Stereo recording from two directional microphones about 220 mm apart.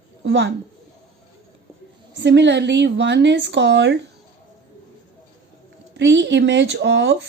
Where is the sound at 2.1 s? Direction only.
50° right (ahead or behind).